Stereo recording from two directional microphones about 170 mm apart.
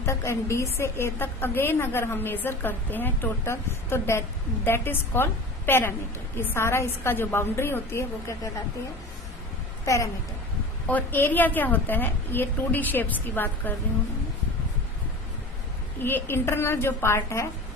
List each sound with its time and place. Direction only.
0.0 s a woman's voice: 15° left (ahead or behind)
9.8 s a woman's voice: 20° left (ahead or behind)
16.0 s a woman's voice: 15° left (ahead or behind)